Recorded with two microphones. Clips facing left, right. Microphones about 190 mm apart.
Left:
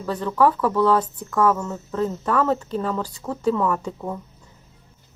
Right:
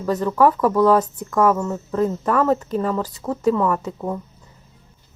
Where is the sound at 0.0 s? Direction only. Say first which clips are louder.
Right 3 dB; 10° right (ahead or behind).